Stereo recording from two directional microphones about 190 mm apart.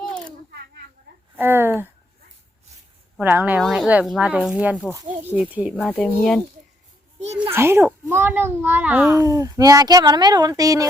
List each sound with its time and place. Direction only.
1.4 s a child's voice: 10° right (ahead or behind)
3.2 s a child's voice: 10° right (ahead or behind)
5.7 s speech: 5° left (ahead or behind)
7.5 s a child's voice: 10° right (ahead or behind)
9.1 s speech: 15° right (ahead or behind)